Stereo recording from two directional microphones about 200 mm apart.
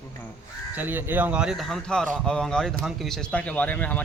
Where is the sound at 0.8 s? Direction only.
10° right (ahead or behind).